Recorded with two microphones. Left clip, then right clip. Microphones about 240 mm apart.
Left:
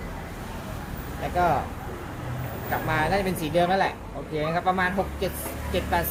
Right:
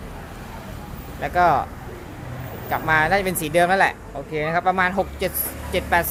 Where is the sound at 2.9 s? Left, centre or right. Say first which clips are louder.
Right 7 dB; right.